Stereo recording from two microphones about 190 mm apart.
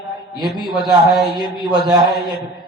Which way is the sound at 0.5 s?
20° right (ahead or behind).